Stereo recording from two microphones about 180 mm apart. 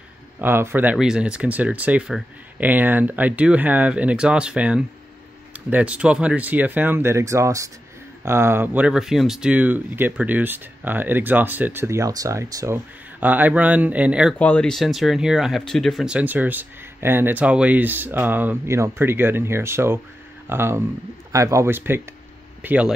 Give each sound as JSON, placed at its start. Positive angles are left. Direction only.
{"t": 0.4, "sound": "speech", "side_deg": -10}
{"t": 14.4, "sound": "speech", "side_deg": 5}